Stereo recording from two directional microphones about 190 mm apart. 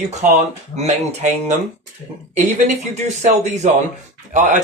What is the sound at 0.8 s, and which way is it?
Speech, 35° right (ahead or behind).